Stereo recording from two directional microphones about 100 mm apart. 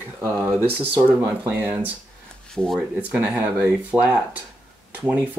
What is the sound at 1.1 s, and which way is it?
Speech, 20° right (ahead or behind).